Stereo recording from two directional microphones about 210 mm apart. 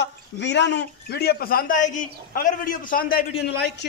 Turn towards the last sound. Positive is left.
turn(degrees=50)  # may be behind; listen again after turning